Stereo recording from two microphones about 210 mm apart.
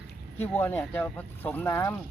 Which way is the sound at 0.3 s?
10° left (ahead or behind).